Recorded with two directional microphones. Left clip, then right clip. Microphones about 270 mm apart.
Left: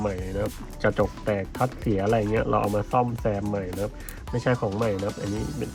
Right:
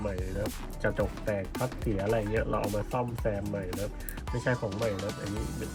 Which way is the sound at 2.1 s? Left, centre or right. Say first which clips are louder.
Left 6 dB; centre.